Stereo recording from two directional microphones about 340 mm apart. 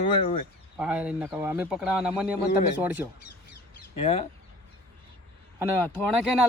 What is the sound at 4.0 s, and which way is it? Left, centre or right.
Speech, centre.